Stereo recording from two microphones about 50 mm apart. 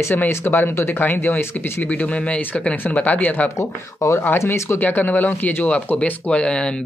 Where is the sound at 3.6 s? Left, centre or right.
Left.